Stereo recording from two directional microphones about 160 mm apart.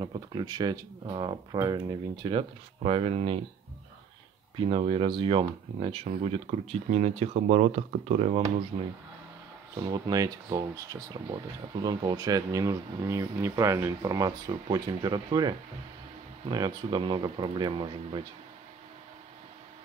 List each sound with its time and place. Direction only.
0.0 s speech: 25° right (ahead or behind)
4.6 s speech: 35° right (ahead or behind)
9.8 s speech: 25° right (ahead or behind)